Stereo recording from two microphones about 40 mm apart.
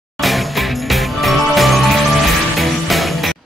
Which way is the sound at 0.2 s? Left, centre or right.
Centre.